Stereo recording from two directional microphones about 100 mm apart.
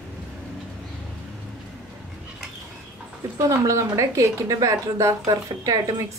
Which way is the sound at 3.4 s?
30° right (ahead or behind).